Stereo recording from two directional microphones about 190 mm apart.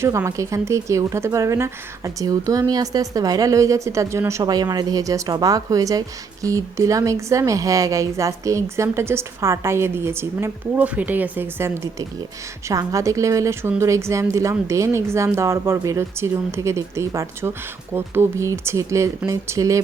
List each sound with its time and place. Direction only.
0.0 s a woman's voice: 15° right (ahead or behind)